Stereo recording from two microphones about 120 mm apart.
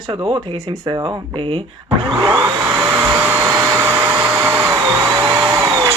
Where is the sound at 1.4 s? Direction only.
50° right (ahead or behind).